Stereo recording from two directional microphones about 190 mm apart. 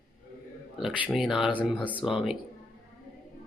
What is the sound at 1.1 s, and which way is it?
Speech, centre (ahead or behind).